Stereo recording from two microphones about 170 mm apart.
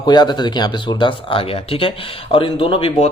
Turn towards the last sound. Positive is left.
turn(degrees=35)  # may be behind; listen again after turning